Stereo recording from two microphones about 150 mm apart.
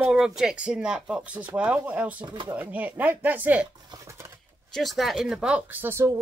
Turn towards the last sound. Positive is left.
turn(degrees=-15)  # may be behind; listen again after turning